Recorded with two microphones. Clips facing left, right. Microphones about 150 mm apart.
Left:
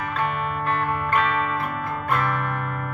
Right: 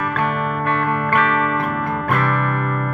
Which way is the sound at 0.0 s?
55° right (ahead or behind).